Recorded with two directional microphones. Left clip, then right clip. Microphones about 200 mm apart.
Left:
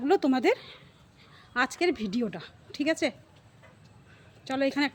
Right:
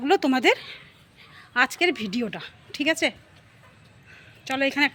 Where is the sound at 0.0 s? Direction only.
Centre (ahead or behind).